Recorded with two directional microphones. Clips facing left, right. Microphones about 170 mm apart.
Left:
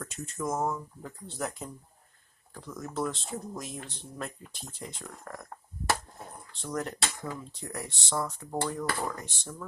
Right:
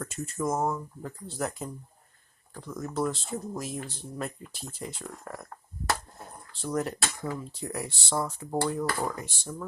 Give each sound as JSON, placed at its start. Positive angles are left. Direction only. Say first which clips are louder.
{"t": 0.0, "sound": "speech", "louder": "right 4 dB", "side_deg": -5}
{"t": 6.5, "sound": "speech", "louder": "right 4 dB", "side_deg": -5}